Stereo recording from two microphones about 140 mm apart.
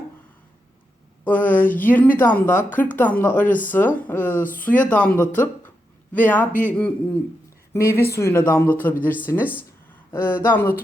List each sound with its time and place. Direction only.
1.2 s speech: 15° left (ahead or behind)